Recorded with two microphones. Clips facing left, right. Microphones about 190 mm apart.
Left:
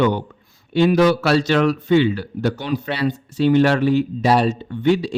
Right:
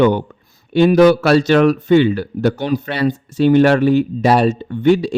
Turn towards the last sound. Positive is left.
turn(degrees=-50)  # may be behind; listen again after turning